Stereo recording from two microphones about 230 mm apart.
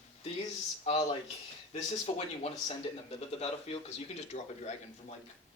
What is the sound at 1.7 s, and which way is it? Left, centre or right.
Speech, left.